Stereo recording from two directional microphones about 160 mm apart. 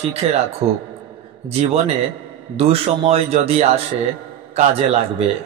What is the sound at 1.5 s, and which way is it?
Speech, 40° right (ahead or behind).